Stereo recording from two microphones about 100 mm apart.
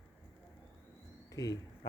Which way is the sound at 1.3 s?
35° left (ahead or behind).